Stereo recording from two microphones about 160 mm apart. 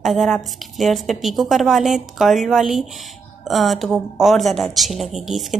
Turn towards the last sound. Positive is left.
turn(degrees=0)  # may be behind; listen again after turning